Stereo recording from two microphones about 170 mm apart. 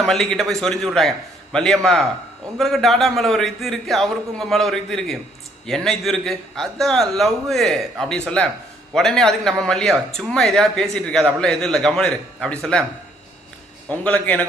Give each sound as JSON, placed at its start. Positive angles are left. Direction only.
{"t": 0.0, "sound": "speech", "side_deg": 0}
{"t": 13.8, "sound": "a man's voice", "side_deg": 10}